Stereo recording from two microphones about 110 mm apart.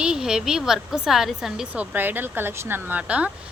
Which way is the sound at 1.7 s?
15° right (ahead or behind).